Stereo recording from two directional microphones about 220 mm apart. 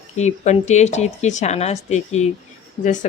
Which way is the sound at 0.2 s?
30° left (ahead or behind).